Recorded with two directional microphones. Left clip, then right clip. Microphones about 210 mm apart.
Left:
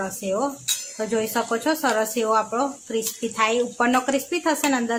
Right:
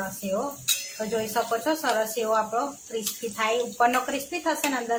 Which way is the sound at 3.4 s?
40° left (ahead or behind).